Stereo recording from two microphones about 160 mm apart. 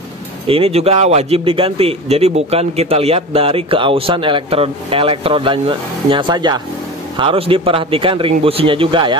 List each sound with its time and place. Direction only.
0.5 s a man's voice: 40° right (ahead or behind)